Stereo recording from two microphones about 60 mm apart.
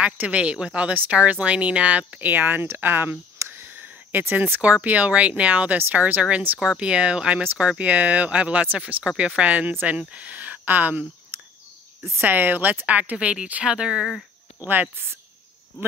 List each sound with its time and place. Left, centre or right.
0.0 s speech: right
4.8 s speech: right
11.3 s cricket: right
12.2 s speech: right; by 14.0 s centre
14.7 s speech: right